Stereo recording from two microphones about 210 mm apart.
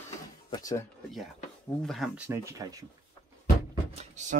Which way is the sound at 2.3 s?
15° right (ahead or behind).